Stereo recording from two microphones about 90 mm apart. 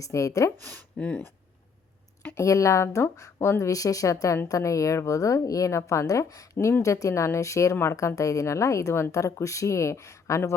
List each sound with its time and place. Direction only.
0.0 s a woman's voice: 35° left (ahead or behind)
0.7 s speech: 15° left (ahead or behind)
2.3 s a woman's voice: 35° left (ahead or behind)